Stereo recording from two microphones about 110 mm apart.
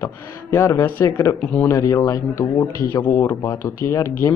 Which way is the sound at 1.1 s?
15° left (ahead or behind).